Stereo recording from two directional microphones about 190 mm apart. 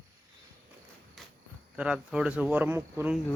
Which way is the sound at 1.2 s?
Centre (ahead or behind).